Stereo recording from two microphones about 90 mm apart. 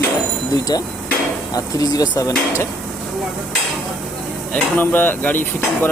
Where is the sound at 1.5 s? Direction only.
45° left (ahead or behind).